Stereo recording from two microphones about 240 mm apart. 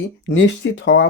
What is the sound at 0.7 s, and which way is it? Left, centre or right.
Speech, left.